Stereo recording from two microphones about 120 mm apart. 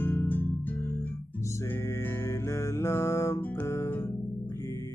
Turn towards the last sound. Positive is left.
turn(degrees=20)  # may be behind; listen again after turning